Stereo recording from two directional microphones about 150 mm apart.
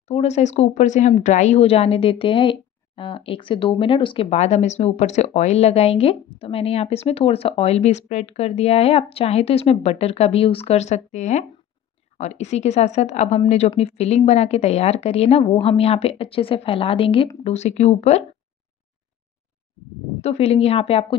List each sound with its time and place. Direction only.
0.1 s a woman's voice: 45° left (ahead or behind)
4.3 s a woman's voice: 50° left (ahead or behind)
20.2 s a woman's voice: 45° left (ahead or behind)